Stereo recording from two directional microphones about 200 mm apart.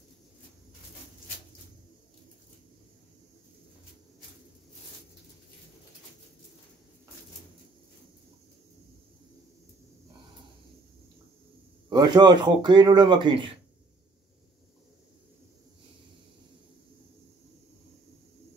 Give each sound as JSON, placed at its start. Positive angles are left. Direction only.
{"t": 11.9, "sound": "speech", "side_deg": -20}